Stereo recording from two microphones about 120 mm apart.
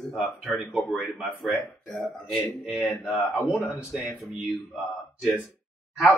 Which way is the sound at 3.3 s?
25° left (ahead or behind).